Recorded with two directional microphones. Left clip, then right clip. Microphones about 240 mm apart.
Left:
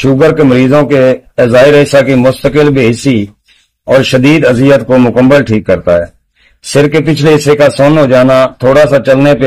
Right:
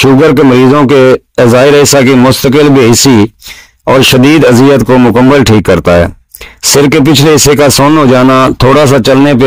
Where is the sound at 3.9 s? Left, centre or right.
Right.